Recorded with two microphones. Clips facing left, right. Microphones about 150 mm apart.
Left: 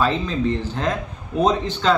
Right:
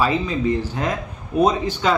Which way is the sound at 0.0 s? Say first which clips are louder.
Right 1 dB; 10° right (ahead or behind).